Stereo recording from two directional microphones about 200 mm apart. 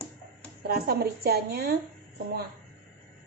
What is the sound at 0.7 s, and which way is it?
A woman's voice, 50° right (ahead or behind).